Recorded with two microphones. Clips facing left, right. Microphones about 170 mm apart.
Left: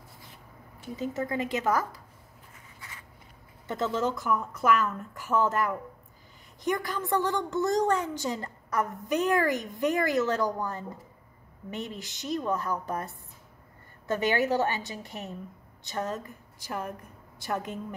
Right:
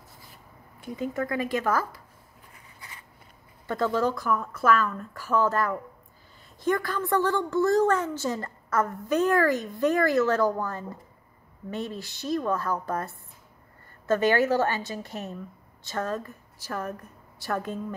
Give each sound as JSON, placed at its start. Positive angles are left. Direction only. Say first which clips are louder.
{"t": 1.2, "sound": "a woman's voice", "louder": "right 1 dB", "side_deg": 20}
{"t": 3.6, "sound": "a woman's voice", "louder": "right 3 dB", "side_deg": 20}